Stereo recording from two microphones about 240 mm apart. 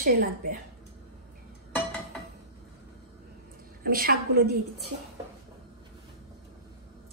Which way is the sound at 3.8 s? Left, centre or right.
Right.